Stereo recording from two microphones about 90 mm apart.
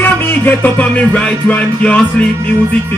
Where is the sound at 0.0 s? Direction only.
20° left (ahead or behind).